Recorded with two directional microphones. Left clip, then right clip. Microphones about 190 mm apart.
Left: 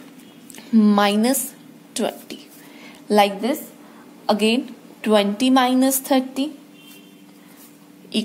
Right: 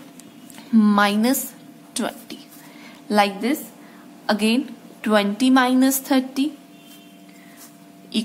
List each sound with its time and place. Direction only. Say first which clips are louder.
0.7 s a woman's voice: left 1 dB; 10° left (ahead or behind)
2.0 s a sound: left 3 dB; 10° left (ahead or behind)
3.1 s a woman's voice: left 2 dB; 10° left (ahead or behind)